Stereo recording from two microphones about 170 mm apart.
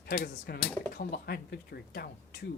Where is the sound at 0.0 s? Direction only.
60° left (ahead or behind).